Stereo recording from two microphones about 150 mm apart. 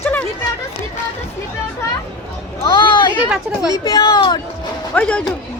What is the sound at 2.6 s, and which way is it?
Speech, 30° left (ahead or behind).